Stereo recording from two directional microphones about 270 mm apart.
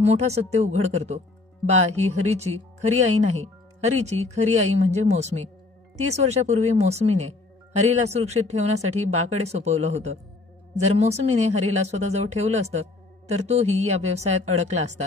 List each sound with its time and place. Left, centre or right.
0.0 s speech: right
2.5 s speech: right
2.8 s speech: right